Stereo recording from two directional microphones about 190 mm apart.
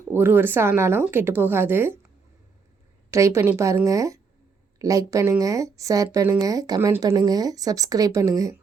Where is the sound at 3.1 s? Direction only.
15° right (ahead or behind).